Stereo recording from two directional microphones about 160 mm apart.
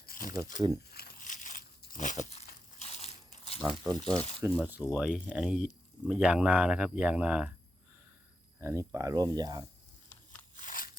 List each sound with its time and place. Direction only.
0.0 s a sound: 60° left (ahead or behind)
0.9 s crumpling: 85° left
1.2 s crushing: 55° left (ahead or behind)
1.8 s crunch: 55° left (ahead or behind); by 3.6 s 40° left (ahead or behind)
3.6 s speech: 30° right (ahead or behind)
4.4 s speech: 10° right (ahead or behind)
8.6 s speech: 20° right (ahead or behind)
10.6 s crunch: 60° left (ahead or behind)